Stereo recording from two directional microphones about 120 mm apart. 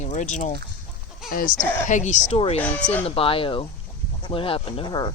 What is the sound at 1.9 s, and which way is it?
Speech, 90° left.